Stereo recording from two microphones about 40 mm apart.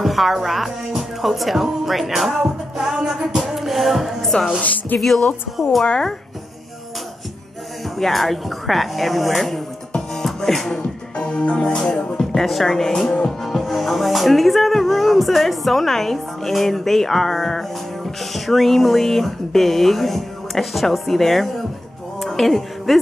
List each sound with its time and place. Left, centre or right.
0.0 s music: centre
4.2 s speech: centre
4.6 s speech: left
5.0 s speech: centre
8.0 s speech: centre
10.2 s music: centre
11.1 s speech: left
12.2 s speech: centre
22.2 s music: centre